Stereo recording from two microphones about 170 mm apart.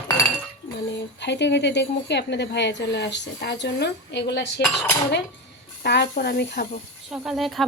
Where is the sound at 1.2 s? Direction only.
90° left.